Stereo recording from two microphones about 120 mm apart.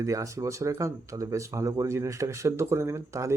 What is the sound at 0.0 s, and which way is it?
Speech, 25° right (ahead or behind).